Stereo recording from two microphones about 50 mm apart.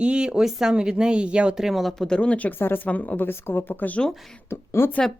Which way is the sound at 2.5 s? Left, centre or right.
Left.